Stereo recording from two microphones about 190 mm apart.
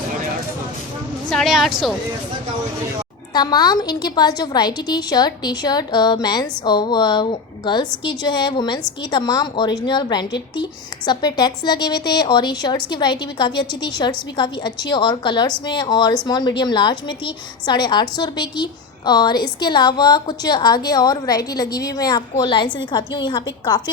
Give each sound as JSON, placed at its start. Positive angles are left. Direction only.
{"t": 1.3, "sound": "speech", "side_deg": 0}
{"t": 3.3, "sound": "a woman's voice", "side_deg": 20}